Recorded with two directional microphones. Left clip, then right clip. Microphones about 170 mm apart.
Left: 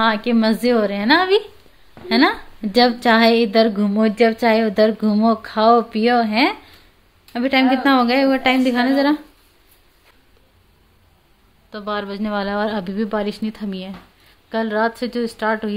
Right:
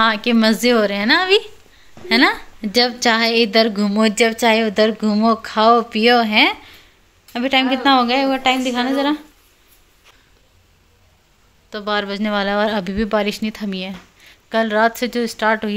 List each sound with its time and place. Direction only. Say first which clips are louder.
0.0 s a woman's voice: right 2 dB; centre (ahead or behind); by 9.2 s 15° left (ahead or behind)
11.7 s speech: right 4 dB; 15° right (ahead or behind)